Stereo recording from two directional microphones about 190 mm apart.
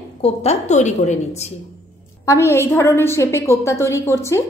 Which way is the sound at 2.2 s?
15° left (ahead or behind).